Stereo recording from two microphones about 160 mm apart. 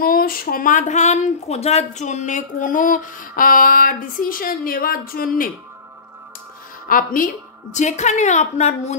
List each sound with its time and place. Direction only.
0.0 s speech: 65° left (ahead or behind)
6.9 s a woman's voice: 60° left (ahead or behind)